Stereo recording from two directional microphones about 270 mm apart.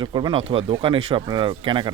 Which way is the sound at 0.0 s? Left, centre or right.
Centre.